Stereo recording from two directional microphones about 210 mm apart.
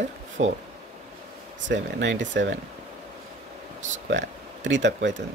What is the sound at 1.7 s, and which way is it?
Speech, 60° right (ahead or behind).